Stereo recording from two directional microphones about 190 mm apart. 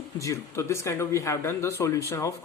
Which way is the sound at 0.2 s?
15° left (ahead or behind).